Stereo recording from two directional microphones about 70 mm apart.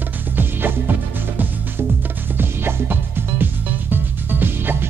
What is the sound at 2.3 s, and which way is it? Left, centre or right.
Music, right.